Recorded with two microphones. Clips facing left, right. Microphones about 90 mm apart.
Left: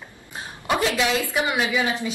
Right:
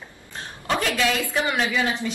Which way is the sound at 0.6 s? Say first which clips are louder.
Left 1 dB; 20° left (ahead or behind).